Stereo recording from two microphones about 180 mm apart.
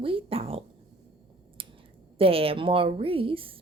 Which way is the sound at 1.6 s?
30° right (ahead or behind).